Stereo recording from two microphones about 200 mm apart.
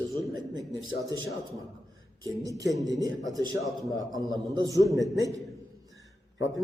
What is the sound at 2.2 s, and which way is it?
Speech, 15° right (ahead or behind).